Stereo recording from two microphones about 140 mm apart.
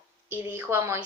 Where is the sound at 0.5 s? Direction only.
15° right (ahead or behind).